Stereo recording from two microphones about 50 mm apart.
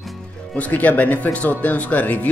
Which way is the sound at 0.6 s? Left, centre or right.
Left.